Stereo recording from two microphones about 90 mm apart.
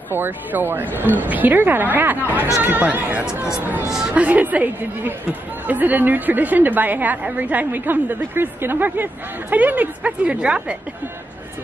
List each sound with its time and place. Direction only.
0.1 s a woman's voice: 20° right (ahead or behind)